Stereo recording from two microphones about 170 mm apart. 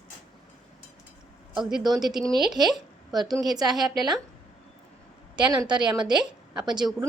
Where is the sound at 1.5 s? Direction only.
Centre (ahead or behind).